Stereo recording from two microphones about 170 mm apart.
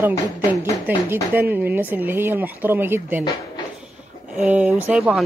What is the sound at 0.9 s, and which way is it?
Speech, 10° right (ahead or behind).